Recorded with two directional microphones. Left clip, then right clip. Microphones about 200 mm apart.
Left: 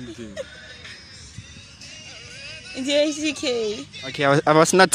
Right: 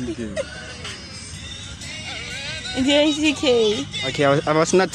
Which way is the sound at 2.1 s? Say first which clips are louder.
Right 9 dB; 10° right (ahead or behind).